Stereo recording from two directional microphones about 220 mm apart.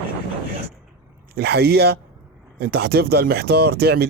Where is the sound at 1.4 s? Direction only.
45° right (ahead or behind).